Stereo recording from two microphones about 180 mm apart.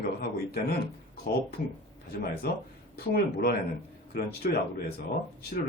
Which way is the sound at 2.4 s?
60° left (ahead or behind).